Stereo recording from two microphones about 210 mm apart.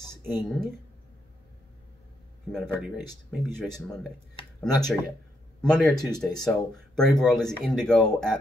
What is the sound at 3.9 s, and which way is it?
Speech, 25° left (ahead or behind).